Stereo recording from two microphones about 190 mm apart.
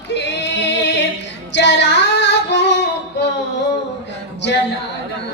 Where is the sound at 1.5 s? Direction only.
65° left (ahead or behind).